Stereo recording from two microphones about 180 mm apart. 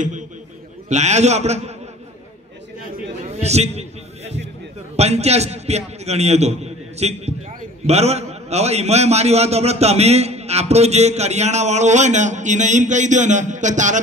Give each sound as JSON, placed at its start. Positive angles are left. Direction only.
{"t": 0.8, "sound": "a man's voice", "side_deg": -40}
{"t": 3.3, "sound": "a sound", "side_deg": -35}
{"t": 4.9, "sound": "a man's voice", "side_deg": -35}